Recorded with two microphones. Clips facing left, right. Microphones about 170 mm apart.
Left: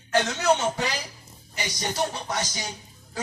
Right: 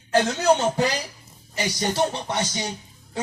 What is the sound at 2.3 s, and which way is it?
Speech, 25° right (ahead or behind).